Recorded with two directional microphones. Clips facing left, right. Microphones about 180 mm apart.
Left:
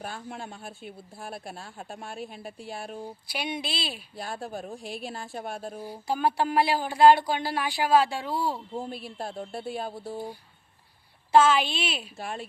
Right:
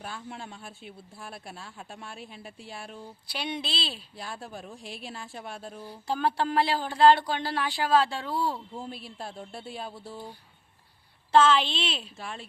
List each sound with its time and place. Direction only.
0.0 s speech: 50° left (ahead or behind)
3.2 s speech: 10° left (ahead or behind)
4.2 s speech: 50° left (ahead or behind)
6.1 s speech: 10° left (ahead or behind)
8.9 s speech: 50° left (ahead or behind)
11.3 s speech: 10° left (ahead or behind)
12.1 s speech: 45° left (ahead or behind)